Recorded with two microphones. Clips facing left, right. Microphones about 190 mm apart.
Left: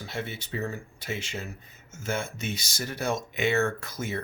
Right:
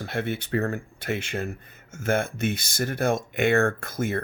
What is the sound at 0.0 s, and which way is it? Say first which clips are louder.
Speech: right 6 dB; 60° right (ahead or behind).